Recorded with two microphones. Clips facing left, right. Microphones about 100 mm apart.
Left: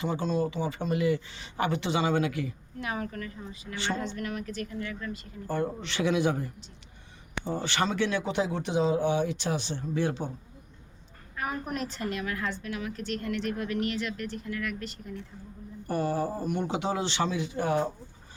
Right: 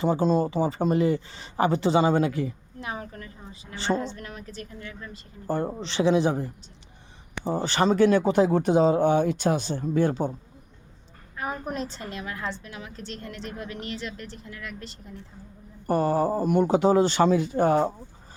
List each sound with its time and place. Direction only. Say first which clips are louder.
0.0 s a woman's voice: right 6 dB; 40° right (ahead or behind)
11.3 s a woman's voice: right 2 dB; 25° right (ahead or behind)
15.9 s speech: right 6 dB; 40° right (ahead or behind)